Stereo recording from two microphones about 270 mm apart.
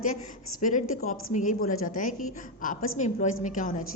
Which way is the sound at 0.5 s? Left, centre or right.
Left.